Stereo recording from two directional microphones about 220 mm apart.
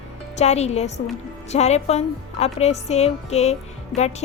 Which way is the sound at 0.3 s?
30° left (ahead or behind).